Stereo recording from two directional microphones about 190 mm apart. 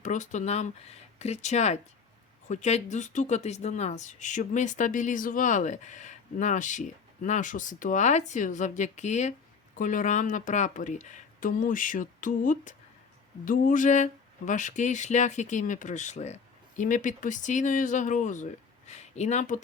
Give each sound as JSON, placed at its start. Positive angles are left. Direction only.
{"t": 0.0, "sound": "speech", "side_deg": 40}